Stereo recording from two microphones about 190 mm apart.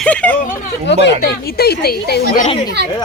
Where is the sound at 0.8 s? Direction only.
65° left (ahead or behind).